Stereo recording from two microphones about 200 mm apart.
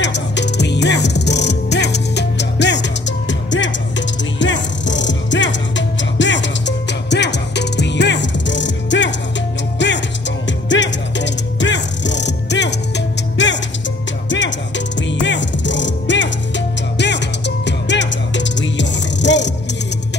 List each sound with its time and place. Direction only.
0.0 s music: 60° left (ahead or behind)
15.0 s music: 65° left (ahead or behind)